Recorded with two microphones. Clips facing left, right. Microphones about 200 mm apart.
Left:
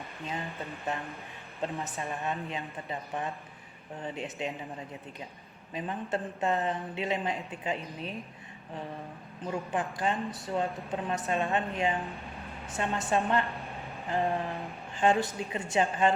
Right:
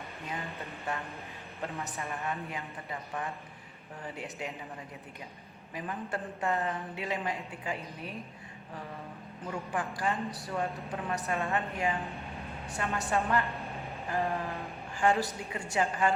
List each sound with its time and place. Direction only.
0.6 s speech: 15° left (ahead or behind)
5.7 s speech: 25° left (ahead or behind)
9.5 s speech: 20° left (ahead or behind)
13.4 s a sound: centre (ahead or behind)
14.1 s a sound: 20° left (ahead or behind)
15.4 s speech: 20° left (ahead or behind)